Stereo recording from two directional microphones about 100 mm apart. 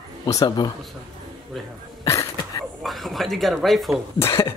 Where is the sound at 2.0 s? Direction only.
35° left (ahead or behind).